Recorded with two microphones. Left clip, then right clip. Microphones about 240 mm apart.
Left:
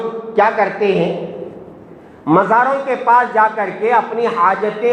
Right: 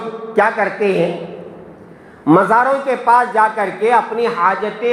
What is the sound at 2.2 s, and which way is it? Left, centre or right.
A man's voice, right.